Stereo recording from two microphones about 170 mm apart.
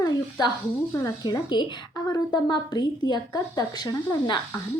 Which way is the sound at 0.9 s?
20° left (ahead or behind).